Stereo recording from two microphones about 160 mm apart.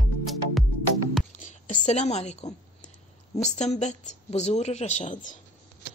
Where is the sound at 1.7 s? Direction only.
45° left (ahead or behind).